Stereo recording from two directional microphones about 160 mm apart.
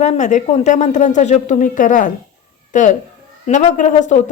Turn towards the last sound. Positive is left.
turn(degrees=45)  # may be behind; listen again after turning